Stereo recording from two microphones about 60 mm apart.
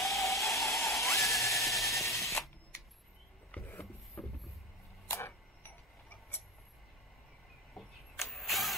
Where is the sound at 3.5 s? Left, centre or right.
Left.